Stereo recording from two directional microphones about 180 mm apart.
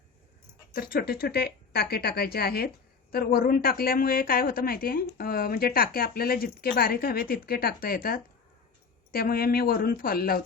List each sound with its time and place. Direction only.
0.7 s a woman's voice: 55° left (ahead or behind)